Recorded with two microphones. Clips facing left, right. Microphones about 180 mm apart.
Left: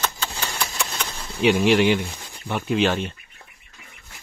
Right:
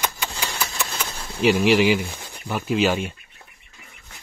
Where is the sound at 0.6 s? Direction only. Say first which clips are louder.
Even; centre (ahead or behind).